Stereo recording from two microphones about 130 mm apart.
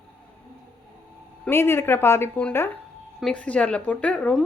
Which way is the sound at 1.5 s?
20° left (ahead or behind).